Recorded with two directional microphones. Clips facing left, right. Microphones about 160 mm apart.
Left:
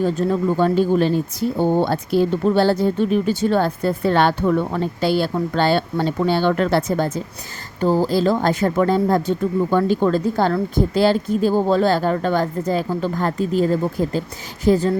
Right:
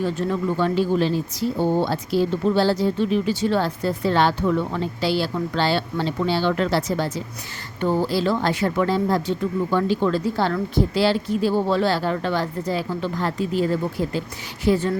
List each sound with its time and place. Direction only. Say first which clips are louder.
0.0 s speech: left 4 dB; 40° left (ahead or behind)
7.8 s speech: left 4 dB; 40° left (ahead or behind)